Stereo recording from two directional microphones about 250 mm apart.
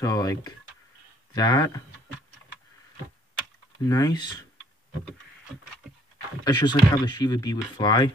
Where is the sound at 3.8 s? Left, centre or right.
Centre.